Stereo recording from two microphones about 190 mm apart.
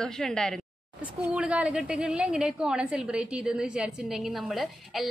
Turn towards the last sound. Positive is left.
turn(degrees=0)  # may be behind; listen again after turning